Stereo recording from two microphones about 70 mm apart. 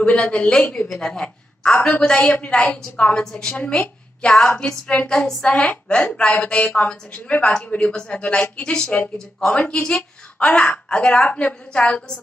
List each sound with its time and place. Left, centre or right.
0.0 s a woman's voice: centre